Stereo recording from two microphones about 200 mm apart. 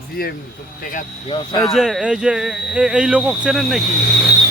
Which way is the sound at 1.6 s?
Centre (ahead or behind).